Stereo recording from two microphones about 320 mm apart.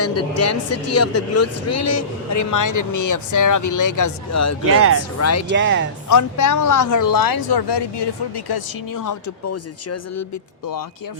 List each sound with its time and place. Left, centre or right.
0.0 s speech: left
4.6 s speech: right
5.2 s speech: left
5.5 s speech: right
6.1 s speech: left
8.9 s speech: left
9.5 s speech: left